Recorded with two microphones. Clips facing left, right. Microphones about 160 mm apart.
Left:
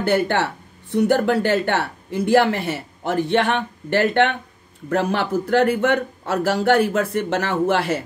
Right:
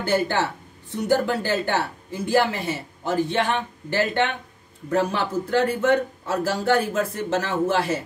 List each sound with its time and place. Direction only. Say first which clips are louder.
0.0 s speech: left 3 dB; 65° left (ahead or behind)